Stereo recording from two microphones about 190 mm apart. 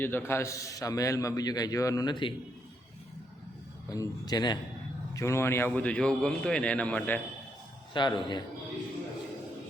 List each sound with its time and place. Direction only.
0.0 s a man's voice: 10° left (ahead or behind)
3.8 s a man's voice: 20° left (ahead or behind)
7.9 s speech: 25° left (ahead or behind)